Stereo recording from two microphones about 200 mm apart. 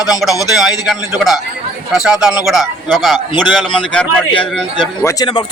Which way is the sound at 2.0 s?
5° right (ahead or behind).